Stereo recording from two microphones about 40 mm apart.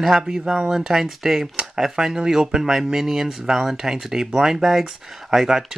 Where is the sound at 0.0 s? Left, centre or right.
Centre.